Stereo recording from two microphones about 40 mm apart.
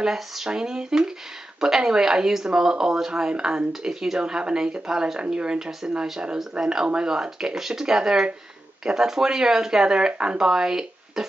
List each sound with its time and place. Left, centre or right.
0.0 s speech: centre; by 6.0 s right
6.6 s speech: centre